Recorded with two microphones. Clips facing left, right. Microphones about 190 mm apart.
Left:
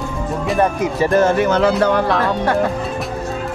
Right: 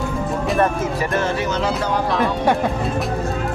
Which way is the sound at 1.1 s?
50° left (ahead or behind).